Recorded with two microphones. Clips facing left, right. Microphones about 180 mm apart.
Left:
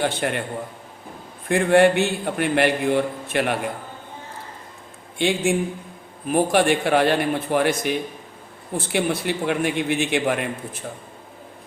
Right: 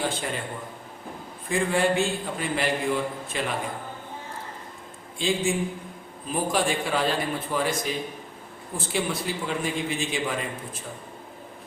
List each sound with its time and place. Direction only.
0.0 s a man's voice: 65° left (ahead or behind)
1.5 s a man's voice: 70° left (ahead or behind)
5.1 s a man's voice: 70° left (ahead or behind)